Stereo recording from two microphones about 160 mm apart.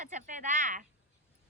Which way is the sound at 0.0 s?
50° right (ahead or behind).